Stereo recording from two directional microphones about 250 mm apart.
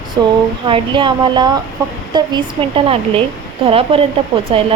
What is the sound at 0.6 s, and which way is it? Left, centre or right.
A woman's voice, right.